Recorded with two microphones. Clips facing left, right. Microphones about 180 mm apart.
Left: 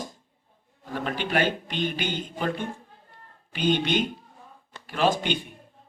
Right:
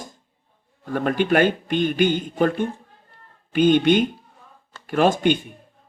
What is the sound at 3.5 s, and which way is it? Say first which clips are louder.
A man's voice: right 8 dB; 50° right (ahead or behind).